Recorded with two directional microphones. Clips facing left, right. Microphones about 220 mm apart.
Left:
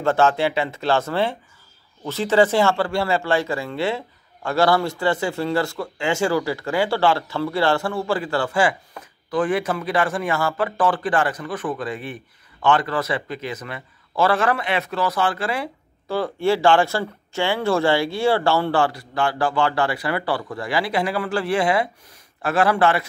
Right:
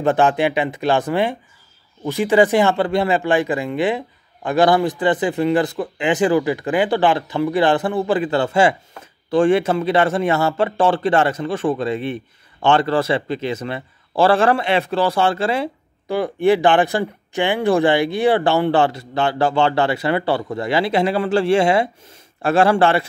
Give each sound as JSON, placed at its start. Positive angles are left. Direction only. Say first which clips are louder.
{"t": 0.0, "sound": "speech", "louder": "right 2 dB", "side_deg": -15}